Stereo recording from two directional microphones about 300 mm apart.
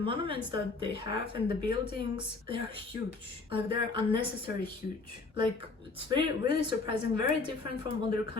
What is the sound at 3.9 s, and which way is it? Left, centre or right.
Speech, centre.